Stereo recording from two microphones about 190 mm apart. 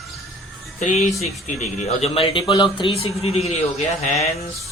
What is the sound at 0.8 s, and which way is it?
A man's voice, 40° left (ahead or behind).